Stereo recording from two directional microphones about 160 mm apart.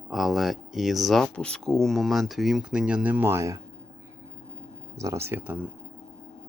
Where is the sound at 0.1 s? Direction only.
Centre (ahead or behind); by 3.6 s 20° right (ahead or behind).